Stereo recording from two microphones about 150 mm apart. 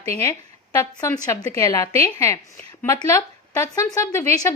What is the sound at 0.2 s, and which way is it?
A woman's voice, 20° left (ahead or behind).